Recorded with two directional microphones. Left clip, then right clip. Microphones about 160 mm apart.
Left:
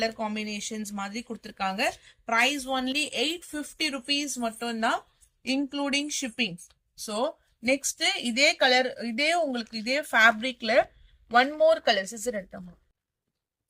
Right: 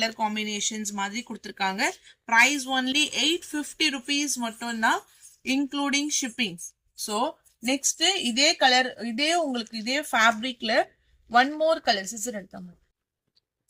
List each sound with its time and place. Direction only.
0.0 s speech: 35° left (ahead or behind)